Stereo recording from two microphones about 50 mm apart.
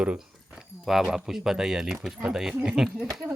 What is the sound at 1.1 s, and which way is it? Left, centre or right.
Speech, centre.